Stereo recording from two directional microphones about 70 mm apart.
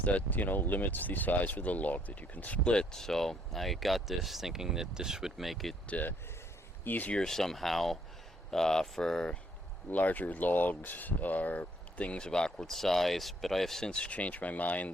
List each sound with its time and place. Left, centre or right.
0.0 s speech: left; by 5.7 s centre
5.9 s speech: left
7.2 s speech: centre
9.9 s speech: left